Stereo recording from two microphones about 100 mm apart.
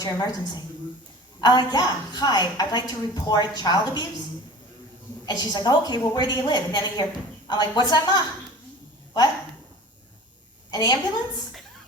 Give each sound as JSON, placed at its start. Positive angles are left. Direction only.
{"t": 0.0, "sound": "a woman's voice", "side_deg": 40}
{"t": 5.2, "sound": "a woman's voice", "side_deg": 45}
{"t": 10.7, "sound": "a woman's voice", "side_deg": 45}